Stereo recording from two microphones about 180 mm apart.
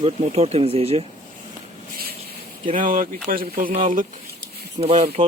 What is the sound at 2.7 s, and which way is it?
Speech, 50° right (ahead or behind).